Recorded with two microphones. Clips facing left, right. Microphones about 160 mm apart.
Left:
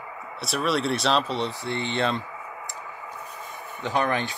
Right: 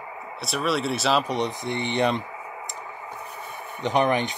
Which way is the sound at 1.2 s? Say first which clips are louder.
Right 2 dB; 15° right (ahead or behind).